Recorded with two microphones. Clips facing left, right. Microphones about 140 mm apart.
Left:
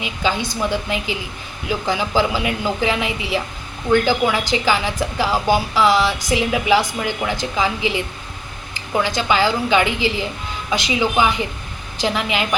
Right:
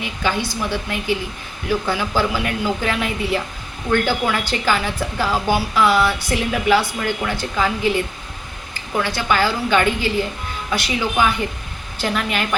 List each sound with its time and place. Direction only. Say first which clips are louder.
0.0 s a woman's voice: left 1 dB; 15° left (ahead or behind)